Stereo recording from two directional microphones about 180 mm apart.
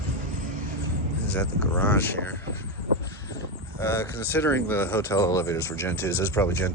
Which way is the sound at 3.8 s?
15° left (ahead or behind).